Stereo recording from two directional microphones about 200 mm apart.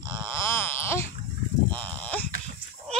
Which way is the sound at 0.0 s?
10° left (ahead or behind).